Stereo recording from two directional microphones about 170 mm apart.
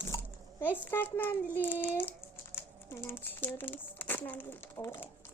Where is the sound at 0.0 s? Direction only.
10° left (ahead or behind).